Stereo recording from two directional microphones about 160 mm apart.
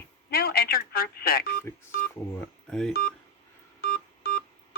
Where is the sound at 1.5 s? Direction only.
15° left (ahead or behind).